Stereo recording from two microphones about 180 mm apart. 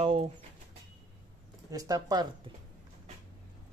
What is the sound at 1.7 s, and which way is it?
Speech, 20° right (ahead or behind).